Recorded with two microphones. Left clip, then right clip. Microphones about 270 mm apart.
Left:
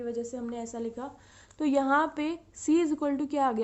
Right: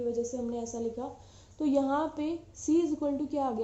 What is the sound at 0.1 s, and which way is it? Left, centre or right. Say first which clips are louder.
Speech: right 2 dB; left.